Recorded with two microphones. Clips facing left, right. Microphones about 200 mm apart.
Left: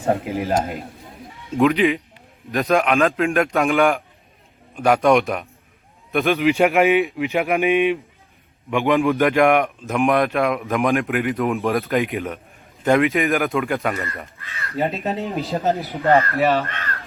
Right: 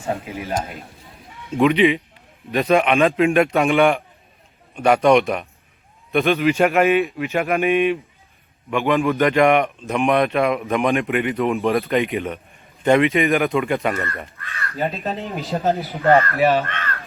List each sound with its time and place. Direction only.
0.0 s speech: 50° left (ahead or behind)
1.5 s a man's voice: centre (ahead or behind)
6.3 s speech: 15° left (ahead or behind)
9.4 s a man's voice: centre (ahead or behind)
16.4 s speech: 15° right (ahead or behind)
16.7 s speech: 15° left (ahead or behind)